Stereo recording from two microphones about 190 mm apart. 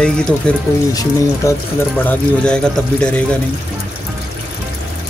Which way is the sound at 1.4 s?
15° left (ahead or behind).